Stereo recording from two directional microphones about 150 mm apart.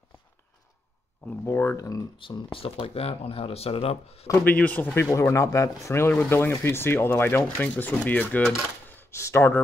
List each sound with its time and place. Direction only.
1.2 s speech: 15° left (ahead or behind)
2.1 s speech: 35° left (ahead or behind)
4.3 s speech: 10° left (ahead or behind)